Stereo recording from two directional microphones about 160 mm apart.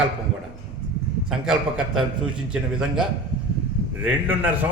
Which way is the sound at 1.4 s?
5° right (ahead or behind).